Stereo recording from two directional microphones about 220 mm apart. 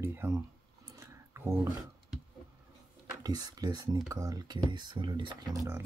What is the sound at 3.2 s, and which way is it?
Speech, 15° right (ahead or behind).